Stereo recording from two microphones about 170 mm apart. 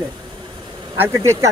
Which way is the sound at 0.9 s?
15° right (ahead or behind).